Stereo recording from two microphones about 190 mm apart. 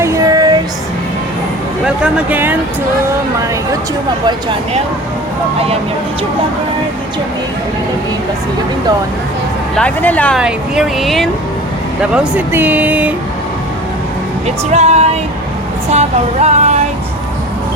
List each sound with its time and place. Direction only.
0.0 s female singing: 15° right (ahead or behind)
1.8 s speech: 5° right (ahead or behind)
4.3 s speech: 25° right (ahead or behind)
9.7 s speech: 5° left (ahead or behind); by 13.1 s 10° right (ahead or behind)
14.4 s music: 35° right (ahead or behind)
15.9 s a sound: 35° right (ahead or behind)